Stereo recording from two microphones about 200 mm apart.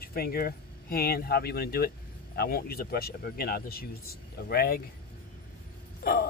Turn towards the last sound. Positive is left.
turn(degrees=50)  # may be behind; listen again after turning